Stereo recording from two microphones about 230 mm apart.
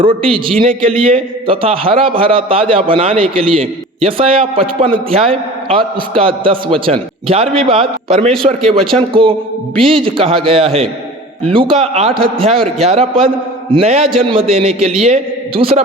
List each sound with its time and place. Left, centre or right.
0.0 s a man's voice: right
0.6 s a man's voice: right
1.0 s a man's voice: right
9.8 s a man's voice: right